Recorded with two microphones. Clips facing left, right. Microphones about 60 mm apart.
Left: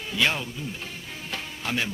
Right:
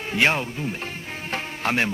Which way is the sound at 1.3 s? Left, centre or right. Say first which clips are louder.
Right 6 dB; right.